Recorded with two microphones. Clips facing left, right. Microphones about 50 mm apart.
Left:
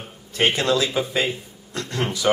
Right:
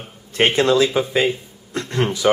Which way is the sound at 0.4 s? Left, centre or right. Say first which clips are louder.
Right 5 dB; right.